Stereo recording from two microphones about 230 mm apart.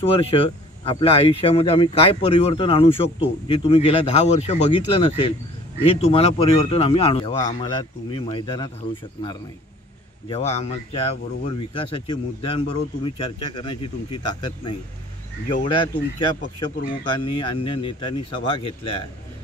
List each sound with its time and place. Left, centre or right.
0.0 s speech: left
10.3 s speech: left